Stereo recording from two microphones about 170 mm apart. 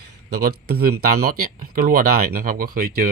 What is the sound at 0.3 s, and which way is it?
Speech, 65° right (ahead or behind).